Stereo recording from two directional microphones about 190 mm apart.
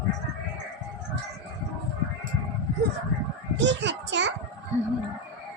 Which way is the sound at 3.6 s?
70° right (ahead or behind).